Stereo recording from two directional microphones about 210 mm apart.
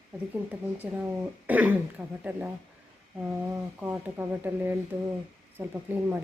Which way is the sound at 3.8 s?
10° right (ahead or behind).